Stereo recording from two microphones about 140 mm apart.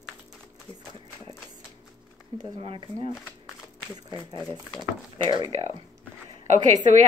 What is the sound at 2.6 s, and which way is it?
Speech, 40° right (ahead or behind).